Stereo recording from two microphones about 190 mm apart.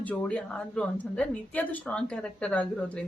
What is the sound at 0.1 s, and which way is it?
A woman's voice, 5° left (ahead or behind).